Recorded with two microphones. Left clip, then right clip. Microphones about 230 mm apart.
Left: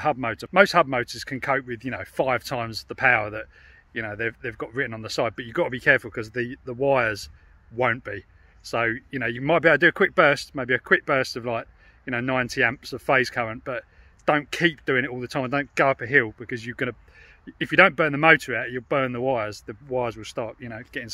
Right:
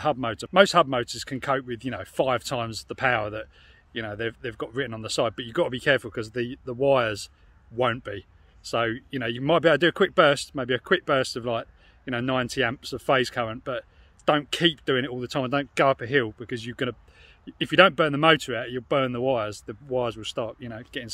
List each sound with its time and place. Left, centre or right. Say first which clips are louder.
0.0 s speech: left 1 dB; centre